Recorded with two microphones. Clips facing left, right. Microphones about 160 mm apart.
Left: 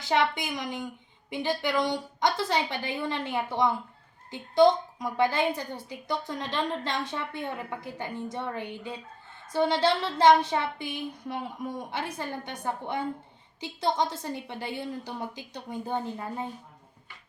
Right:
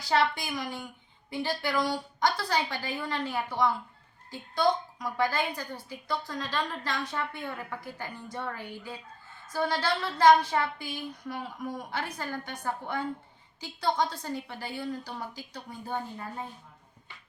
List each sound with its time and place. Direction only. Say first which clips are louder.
0.0 s speech: left 1 dB; 20° left (ahead or behind)